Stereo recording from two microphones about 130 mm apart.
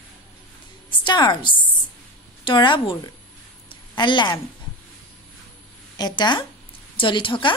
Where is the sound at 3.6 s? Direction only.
35° left (ahead or behind).